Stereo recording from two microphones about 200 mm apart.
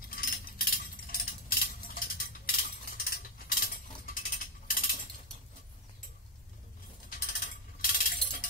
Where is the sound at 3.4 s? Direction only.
45° left (ahead or behind).